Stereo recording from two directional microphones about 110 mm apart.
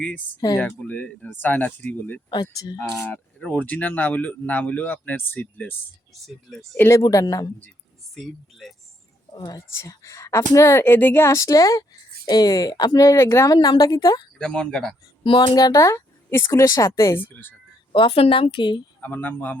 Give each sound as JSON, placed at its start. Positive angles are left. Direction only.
{"t": 0.6, "sound": "speech", "side_deg": 15}
{"t": 2.3, "sound": "speech", "side_deg": 40}
{"t": 3.4, "sound": "speech", "side_deg": 15}
{"t": 6.2, "sound": "speech", "side_deg": 0}
{"t": 6.7, "sound": "a woman's voice", "side_deg": 25}
{"t": 8.1, "sound": "speech", "side_deg": 0}
{"t": 9.3, "sound": "a woman's voice", "side_deg": 35}
{"t": 14.3, "sound": "speech", "side_deg": 10}
{"t": 15.2, "sound": "a woman's voice", "side_deg": 50}
{"t": 17.9, "sound": "a woman's voice", "side_deg": 55}
{"t": 19.0, "sound": "speech", "side_deg": 15}